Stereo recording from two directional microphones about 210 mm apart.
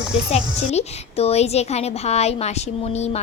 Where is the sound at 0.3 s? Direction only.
30° left (ahead or behind).